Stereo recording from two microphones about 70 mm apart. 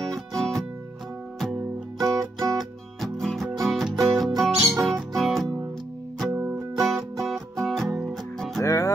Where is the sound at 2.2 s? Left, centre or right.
Right.